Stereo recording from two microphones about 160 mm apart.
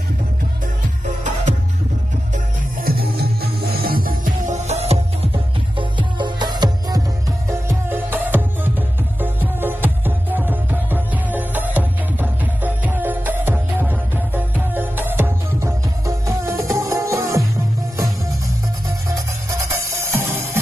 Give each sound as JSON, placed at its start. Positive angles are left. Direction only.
{"t": 2.3, "sound": "music", "side_deg": -65}
{"t": 7.4, "sound": "music", "side_deg": -15}
{"t": 19.1, "sound": "music", "side_deg": -20}